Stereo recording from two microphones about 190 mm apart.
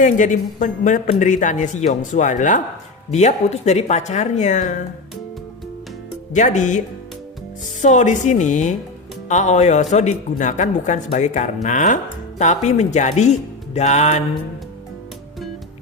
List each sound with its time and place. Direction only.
0.0 s a woman's voice: 40° left (ahead or behind)
6.3 s a woman's voice: 40° left (ahead or behind)